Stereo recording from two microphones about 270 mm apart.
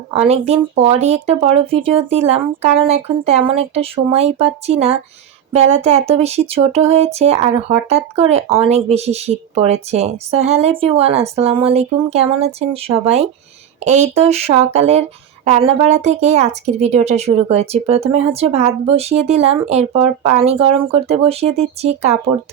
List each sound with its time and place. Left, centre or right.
0.3 s speech: right